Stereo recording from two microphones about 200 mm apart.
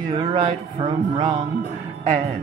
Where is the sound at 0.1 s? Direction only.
25° right (ahead or behind).